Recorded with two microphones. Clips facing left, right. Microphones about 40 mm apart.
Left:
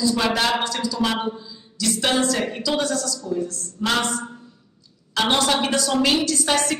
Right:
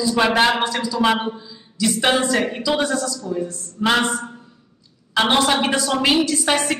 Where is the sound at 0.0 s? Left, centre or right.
Right.